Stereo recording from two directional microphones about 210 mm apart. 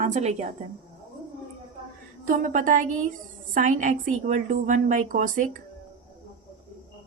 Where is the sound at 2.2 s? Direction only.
40° right (ahead or behind).